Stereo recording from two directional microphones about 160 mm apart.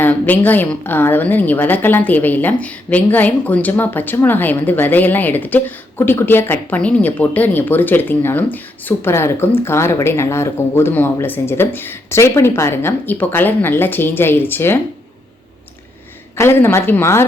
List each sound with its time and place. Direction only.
0.0 s a woman's voice: 10° left (ahead or behind)
16.4 s a woman's voice: 15° left (ahead or behind)